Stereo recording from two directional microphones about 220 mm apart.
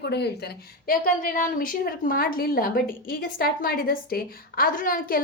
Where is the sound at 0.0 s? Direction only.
50° left (ahead or behind).